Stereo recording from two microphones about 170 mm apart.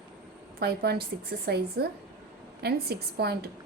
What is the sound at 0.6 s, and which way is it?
A woman's voice, 70° right (ahead or behind).